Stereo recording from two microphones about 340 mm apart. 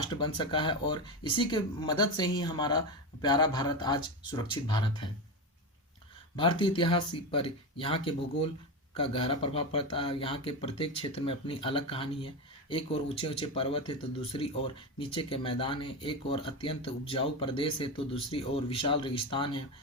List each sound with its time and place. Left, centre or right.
0.1 s speech: centre
6.3 s speech: centre